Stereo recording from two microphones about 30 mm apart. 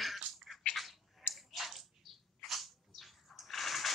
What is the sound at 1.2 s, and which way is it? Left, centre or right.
Squish, centre.